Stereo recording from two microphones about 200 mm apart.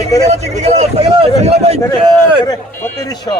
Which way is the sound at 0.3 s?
35° right (ahead or behind).